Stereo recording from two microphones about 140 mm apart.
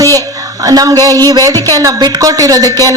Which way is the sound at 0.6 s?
25° right (ahead or behind).